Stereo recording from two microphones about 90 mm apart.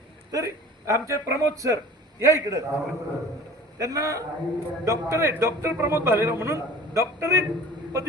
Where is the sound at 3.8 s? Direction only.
40° right (ahead or behind).